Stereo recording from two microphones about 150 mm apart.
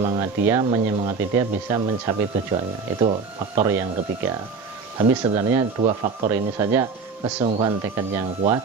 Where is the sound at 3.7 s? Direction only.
15° right (ahead or behind).